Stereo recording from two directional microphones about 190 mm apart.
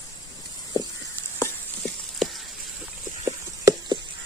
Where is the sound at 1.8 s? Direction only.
Centre (ahead or behind).